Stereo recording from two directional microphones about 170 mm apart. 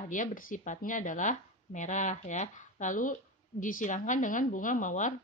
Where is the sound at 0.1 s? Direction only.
50° left (ahead or behind).